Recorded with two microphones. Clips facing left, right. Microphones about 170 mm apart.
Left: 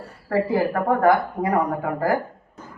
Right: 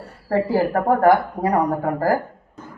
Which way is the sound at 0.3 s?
35° right (ahead or behind).